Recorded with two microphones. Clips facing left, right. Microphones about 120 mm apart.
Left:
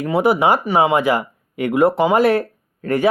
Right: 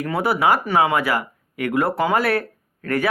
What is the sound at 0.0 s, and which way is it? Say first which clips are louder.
Speech: left 4 dB; 20° left (ahead or behind).